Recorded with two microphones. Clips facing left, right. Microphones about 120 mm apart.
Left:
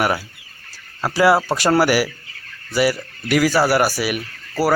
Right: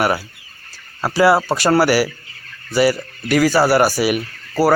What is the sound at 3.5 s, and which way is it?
Speech, 30° right (ahead or behind).